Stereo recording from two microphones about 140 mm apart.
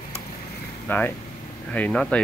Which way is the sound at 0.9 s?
10° left (ahead or behind).